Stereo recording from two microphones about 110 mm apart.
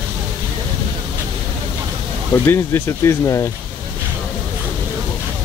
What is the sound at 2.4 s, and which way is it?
Speech, 20° left (ahead or behind).